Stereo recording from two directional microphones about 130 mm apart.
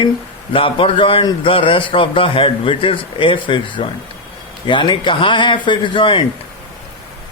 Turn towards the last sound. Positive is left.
turn(degrees=40)  # may be behind; listen again after turning